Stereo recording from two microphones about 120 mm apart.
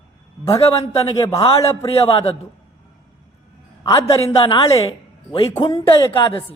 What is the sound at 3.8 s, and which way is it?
Speech, 25° left (ahead or behind).